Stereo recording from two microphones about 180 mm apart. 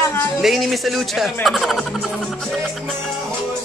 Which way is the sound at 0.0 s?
15° left (ahead or behind).